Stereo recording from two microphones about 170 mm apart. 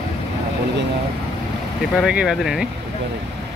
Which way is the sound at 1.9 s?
5° right (ahead or behind).